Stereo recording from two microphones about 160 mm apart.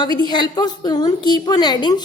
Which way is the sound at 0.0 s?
25° left (ahead or behind).